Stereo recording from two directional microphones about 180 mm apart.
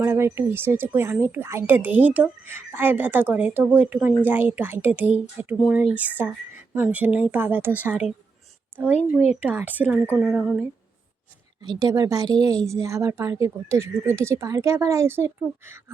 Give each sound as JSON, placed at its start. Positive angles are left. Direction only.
{"t": 0.0, "sound": "a woman's voice", "side_deg": -15}
{"t": 11.6, "sound": "a woman's voice", "side_deg": -20}